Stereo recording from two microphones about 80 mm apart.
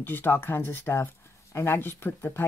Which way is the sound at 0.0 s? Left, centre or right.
Left.